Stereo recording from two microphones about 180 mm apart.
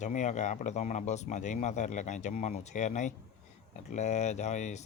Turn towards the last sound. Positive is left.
turn(degrees=40)  # may be behind; listen again after turning